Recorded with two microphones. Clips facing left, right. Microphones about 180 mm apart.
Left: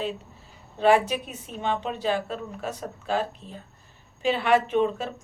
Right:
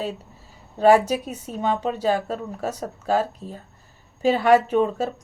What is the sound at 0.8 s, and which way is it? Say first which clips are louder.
Speech: right 4 dB; 40° right (ahead or behind).